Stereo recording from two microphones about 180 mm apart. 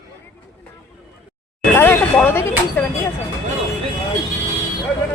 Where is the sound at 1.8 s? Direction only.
10° left (ahead or behind).